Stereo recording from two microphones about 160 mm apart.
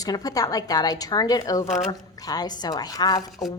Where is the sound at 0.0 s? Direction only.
25° left (ahead or behind).